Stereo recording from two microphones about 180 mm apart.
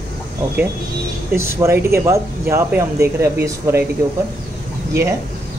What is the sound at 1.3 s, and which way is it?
A man's voice, 15° right (ahead or behind).